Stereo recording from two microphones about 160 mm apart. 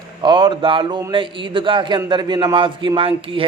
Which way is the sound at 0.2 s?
30° right (ahead or behind).